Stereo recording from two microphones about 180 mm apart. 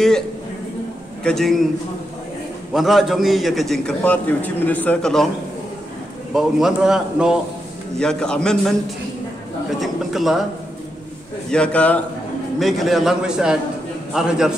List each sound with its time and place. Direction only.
1.2 s a man's voice: centre (ahead or behind)
2.7 s a man's voice: centre (ahead or behind)
6.3 s a man's voice: 5° right (ahead or behind)
11.5 s a man's voice: 5° left (ahead or behind)